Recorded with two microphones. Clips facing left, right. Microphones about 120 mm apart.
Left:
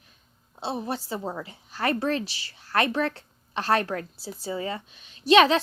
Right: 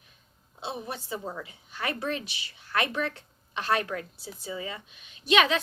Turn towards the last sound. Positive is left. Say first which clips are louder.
# left 6 dB
turn(degrees=35)  # may be behind; listen again after turning